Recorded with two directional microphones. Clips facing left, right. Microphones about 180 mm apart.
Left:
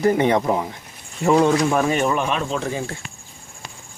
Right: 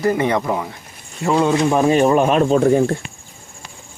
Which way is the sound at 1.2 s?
Centre (ahead or behind).